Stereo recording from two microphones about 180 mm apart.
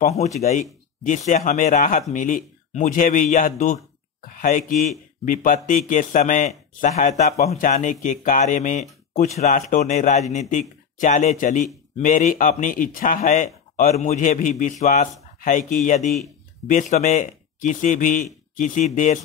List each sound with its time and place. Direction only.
0.2 s speech: 40° left (ahead or behind)